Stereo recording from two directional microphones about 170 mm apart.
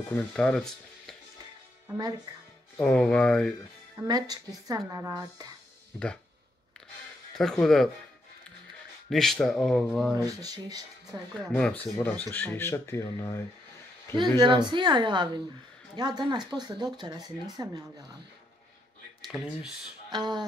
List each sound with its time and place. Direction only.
0.1 s stir: 5° left (ahead or behind)
2.8 s speech: 5° left (ahead or behind)
4.1 s speech: 25° right (ahead or behind)
7.3 s speech: centre (ahead or behind)
9.1 s speech: centre (ahead or behind)
10.1 s speech: 20° right (ahead or behind)
11.3 s speech: 10° left (ahead or behind)
14.4 s speech: 25° right (ahead or behind)
19.2 s speech: centre (ahead or behind)
20.1 s speech: 25° right (ahead or behind)